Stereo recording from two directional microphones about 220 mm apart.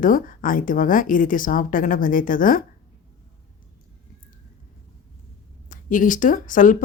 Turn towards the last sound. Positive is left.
turn(degrees=35)  # may be behind; listen again after turning